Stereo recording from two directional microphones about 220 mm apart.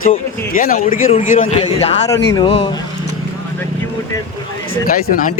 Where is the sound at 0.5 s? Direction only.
40° left (ahead or behind).